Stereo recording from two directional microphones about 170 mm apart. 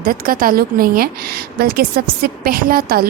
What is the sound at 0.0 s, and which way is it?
A woman's voice, 55° right (ahead or behind).